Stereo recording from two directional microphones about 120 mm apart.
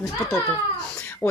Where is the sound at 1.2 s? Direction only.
20° left (ahead or behind).